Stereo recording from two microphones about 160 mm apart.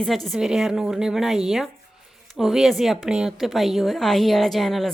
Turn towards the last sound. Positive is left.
turn(degrees=0)  # may be behind; listen again after turning